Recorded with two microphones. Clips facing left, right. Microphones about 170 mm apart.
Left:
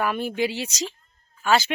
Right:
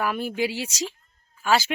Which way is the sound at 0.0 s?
5° right (ahead or behind).